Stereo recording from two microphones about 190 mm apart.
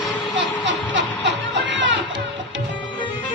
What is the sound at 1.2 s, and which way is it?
Music, 70° right (ahead or behind).